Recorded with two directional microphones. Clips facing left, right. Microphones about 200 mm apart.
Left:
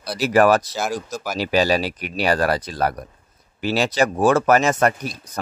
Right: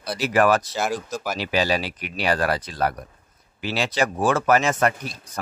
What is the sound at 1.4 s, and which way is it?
Speech, 40° left (ahead or behind).